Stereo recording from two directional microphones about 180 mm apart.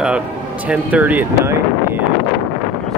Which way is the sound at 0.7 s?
10° right (ahead or behind).